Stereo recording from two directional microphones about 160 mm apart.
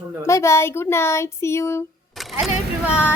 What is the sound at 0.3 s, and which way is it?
Speech, 20° left (ahead or behind).